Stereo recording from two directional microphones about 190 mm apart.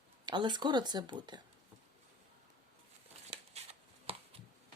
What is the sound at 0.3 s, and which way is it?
Speech, 25° right (ahead or behind).